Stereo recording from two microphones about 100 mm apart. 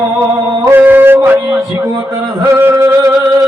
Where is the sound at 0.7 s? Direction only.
20° right (ahead or behind).